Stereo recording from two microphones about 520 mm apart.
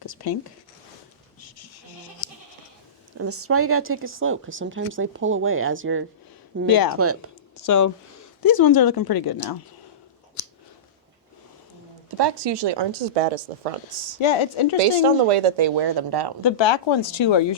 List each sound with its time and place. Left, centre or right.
0.0 s a sound: left
1.4 s a sound: left
3.2 s speech: right
6.7 s speech: left
6.9 s speech: right
7.6 s speech: left
12.1 s speech: right
13.1 s speech: right
14.2 s speech: left
14.8 s a woman's voice: right
16.4 s speech: left